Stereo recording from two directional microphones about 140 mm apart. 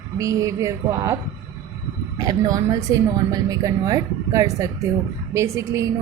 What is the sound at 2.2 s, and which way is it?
A woman's voice, 25° right (ahead or behind).